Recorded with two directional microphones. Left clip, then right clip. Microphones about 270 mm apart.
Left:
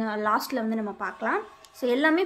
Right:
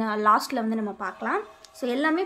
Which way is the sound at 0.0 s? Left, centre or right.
Centre.